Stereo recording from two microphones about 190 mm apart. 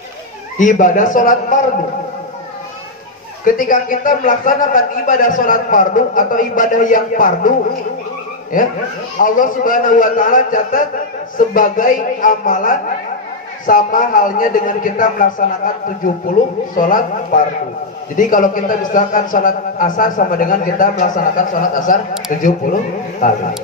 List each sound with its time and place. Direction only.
0.6 s a man's voice: 45° left (ahead or behind)
3.4 s a man's voice: 45° left (ahead or behind)
9.2 s a man's voice: 45° left (ahead or behind)
16.7 s a man's voice: 45° left (ahead or behind)